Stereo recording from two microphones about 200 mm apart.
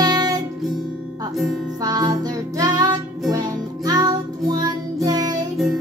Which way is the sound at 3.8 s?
20° right (ahead or behind).